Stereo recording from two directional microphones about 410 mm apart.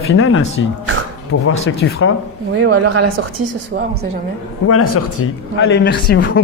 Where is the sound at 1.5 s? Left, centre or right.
Left.